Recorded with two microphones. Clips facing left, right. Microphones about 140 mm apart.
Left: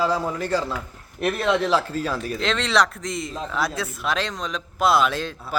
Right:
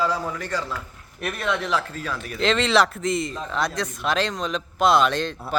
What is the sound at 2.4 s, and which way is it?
Speech, centre (ahead or behind).